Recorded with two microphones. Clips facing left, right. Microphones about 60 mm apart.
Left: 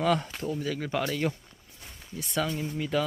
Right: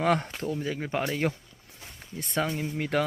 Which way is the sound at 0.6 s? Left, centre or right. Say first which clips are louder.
Left 1 dB; right.